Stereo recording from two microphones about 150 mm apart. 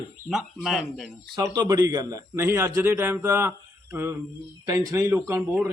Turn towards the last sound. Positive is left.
turn(degrees=-15)  # may be behind; listen again after turning